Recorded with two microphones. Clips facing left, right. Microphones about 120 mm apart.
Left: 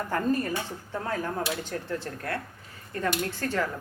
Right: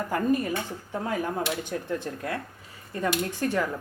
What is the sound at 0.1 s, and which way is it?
Speech, 10° right (ahead or behind).